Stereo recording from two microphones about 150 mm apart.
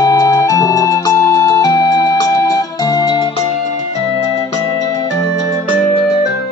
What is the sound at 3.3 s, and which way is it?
Music, 50° left (ahead or behind).